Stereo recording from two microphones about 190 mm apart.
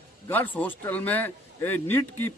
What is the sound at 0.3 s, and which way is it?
A man's voice, 10° left (ahead or behind).